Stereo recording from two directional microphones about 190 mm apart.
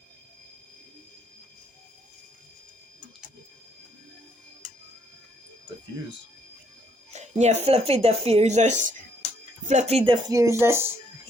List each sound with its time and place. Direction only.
7.1 s speech: 35° right (ahead or behind)
10.3 s speech: 15° right (ahead or behind)